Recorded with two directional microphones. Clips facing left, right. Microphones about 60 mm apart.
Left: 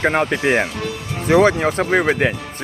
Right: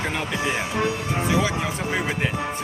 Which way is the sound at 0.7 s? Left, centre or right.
Right.